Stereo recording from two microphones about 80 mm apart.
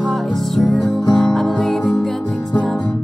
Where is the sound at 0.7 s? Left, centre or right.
Centre.